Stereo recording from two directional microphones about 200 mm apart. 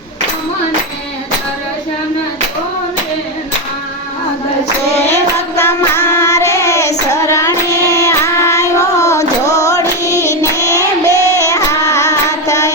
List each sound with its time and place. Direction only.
5.5 s child singing: 10° left (ahead or behind)